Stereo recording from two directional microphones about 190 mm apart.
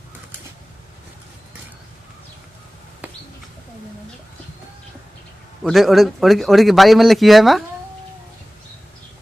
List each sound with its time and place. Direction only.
3.0 s bird: 10° right (ahead or behind)
5.6 s speech: centre (ahead or behind)